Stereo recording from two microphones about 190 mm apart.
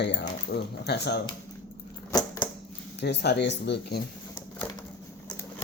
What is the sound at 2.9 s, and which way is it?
Speech, 60° left (ahead or behind).